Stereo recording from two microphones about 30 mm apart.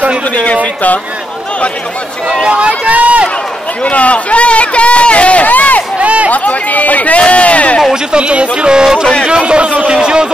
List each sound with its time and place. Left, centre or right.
2.4 s a man's voice: right
2.9 s speech: right
3.8 s speech: left
5.5 s a sound: left
5.9 s a sound: right
6.3 s speech: left
7.2 s speech: left
8.2 s a man's voice: right
8.6 s a man's voice: right